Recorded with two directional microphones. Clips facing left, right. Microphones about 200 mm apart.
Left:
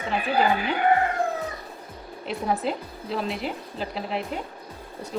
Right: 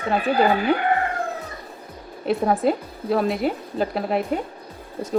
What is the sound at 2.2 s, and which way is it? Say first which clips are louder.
Speech: right 7 dB; 45° right (ahead or behind).